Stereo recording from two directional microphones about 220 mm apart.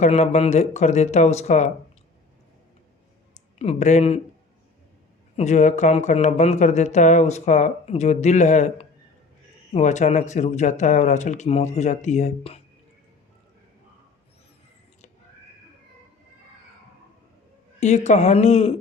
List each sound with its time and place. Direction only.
0.0 s speech: 30° left (ahead or behind)
3.6 s speech: 30° left (ahead or behind)
5.4 s speech: 30° left (ahead or behind)
17.7 s speech: 30° left (ahead or behind)